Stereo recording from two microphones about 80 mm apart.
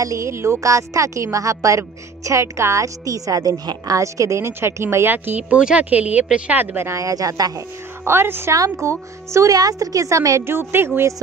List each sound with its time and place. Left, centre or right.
0.0 s a woman's voice: right
6.9 s speech: right
8.0 s a woman's voice: right